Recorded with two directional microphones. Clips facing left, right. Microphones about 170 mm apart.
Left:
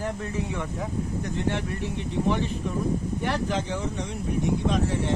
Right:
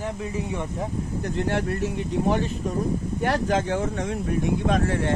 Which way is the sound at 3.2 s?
50° right (ahead or behind).